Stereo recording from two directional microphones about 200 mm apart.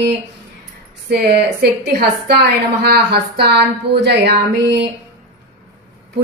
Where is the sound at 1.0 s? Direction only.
55° right (ahead or behind).